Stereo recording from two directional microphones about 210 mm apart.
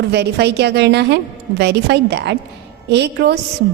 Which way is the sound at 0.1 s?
55° right (ahead or behind).